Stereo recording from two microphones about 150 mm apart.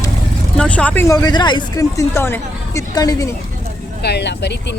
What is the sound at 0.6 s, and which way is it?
Speech, 10° left (ahead or behind).